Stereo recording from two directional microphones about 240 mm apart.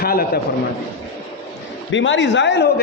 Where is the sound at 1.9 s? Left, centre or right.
Left.